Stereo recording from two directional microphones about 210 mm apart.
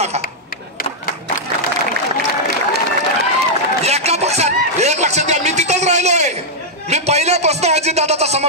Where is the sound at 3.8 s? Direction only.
30° right (ahead or behind).